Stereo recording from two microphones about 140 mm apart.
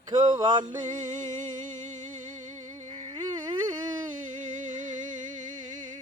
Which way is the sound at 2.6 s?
60° right (ahead or behind).